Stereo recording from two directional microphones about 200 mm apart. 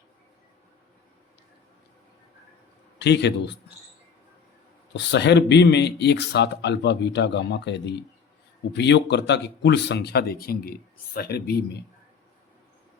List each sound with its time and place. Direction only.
3.0 s speech: 60° left (ahead or behind)
4.9 s speech: 60° left (ahead or behind)